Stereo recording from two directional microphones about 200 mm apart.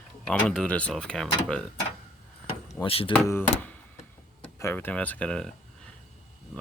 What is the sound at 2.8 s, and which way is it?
Speech, 30° left (ahead or behind).